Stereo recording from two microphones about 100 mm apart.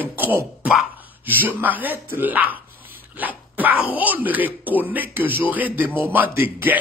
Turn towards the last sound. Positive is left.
turn(degrees=-20)  # may be behind; listen again after turning